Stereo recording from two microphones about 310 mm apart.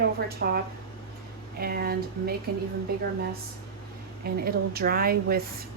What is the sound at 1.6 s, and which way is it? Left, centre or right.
Speech, right.